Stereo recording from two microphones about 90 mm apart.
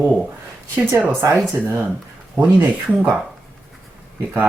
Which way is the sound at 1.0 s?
25° right (ahead or behind).